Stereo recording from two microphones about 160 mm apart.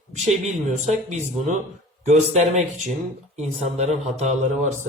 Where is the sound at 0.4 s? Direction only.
45° right (ahead or behind).